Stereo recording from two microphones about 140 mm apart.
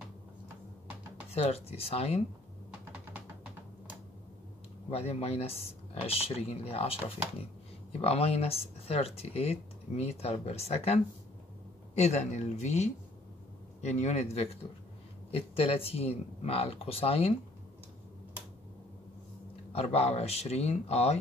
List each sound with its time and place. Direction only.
1.3 s speech: 45° left (ahead or behind)
4.9 s speech: 45° left (ahead or behind)
19.7 s speech: 45° left (ahead or behind)